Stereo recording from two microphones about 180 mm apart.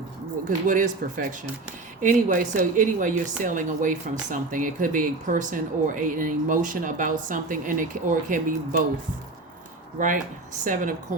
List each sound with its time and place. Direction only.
0.4 s a woman's voice: 45° right (ahead or behind)
10.0 s a woman's voice: 45° right (ahead or behind)